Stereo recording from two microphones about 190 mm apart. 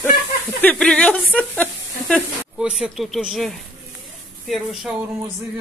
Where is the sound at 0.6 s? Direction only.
5° left (ahead or behind).